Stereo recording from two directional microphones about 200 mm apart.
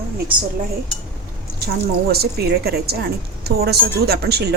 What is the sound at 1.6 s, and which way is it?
A woman's voice, 50° right (ahead or behind).